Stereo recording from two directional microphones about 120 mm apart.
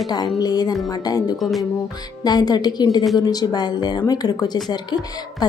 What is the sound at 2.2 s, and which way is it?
A woman's voice, 35° left (ahead or behind).